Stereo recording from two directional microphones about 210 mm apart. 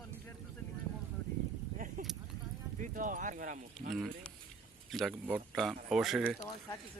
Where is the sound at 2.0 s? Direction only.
40° right (ahead or behind).